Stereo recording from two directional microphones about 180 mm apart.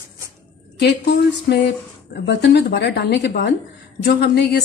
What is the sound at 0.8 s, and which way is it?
A woman's voice, 65° left (ahead or behind).